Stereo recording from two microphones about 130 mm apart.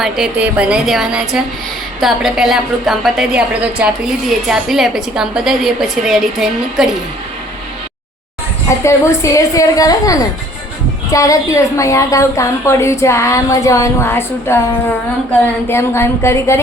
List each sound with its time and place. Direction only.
0.0 s a woman's voice: 10° right (ahead or behind)
8.6 s a woman's voice: 20° left (ahead or behind)